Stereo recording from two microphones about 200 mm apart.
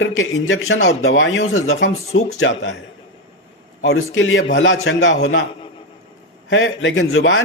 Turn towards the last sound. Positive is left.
turn(degrees=75)  # may be behind; listen again after turning